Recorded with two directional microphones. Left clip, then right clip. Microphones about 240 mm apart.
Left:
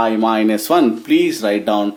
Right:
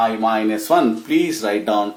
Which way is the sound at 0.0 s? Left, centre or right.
Left.